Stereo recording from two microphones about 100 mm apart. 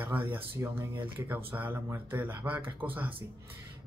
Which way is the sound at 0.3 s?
20° right (ahead or behind).